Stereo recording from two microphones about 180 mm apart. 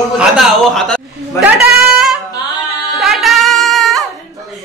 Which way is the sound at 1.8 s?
Centre (ahead or behind).